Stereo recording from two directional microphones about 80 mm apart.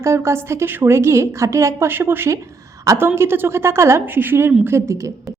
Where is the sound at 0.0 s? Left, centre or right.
Right.